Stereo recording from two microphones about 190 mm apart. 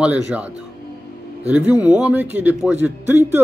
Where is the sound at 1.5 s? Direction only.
5° right (ahead or behind).